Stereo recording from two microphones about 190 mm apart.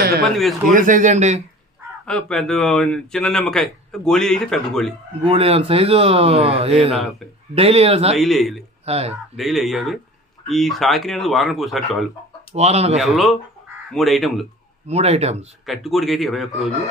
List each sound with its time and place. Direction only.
0.7 s speech: 45° right (ahead or behind)
2.0 s speech: 5° left (ahead or behind)
5.2 s speech: 30° right (ahead or behind)
8.2 s speech: centre (ahead or behind)
8.8 s speech: 35° right (ahead or behind)
9.4 s speech: centre (ahead or behind)
12.5 s speech: 35° right (ahead or behind)
13.0 s speech: centre (ahead or behind)
14.9 s speech: 35° right (ahead or behind)
15.6 s speech: centre (ahead or behind)